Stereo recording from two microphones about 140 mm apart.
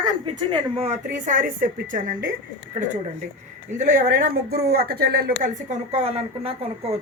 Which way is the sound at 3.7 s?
70° right (ahead or behind).